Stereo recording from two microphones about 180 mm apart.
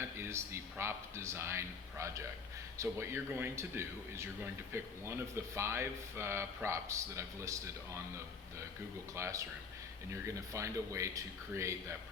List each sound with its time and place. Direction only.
0.2 s speech: 15° right (ahead or behind)
9.1 s speech: 15° right (ahead or behind)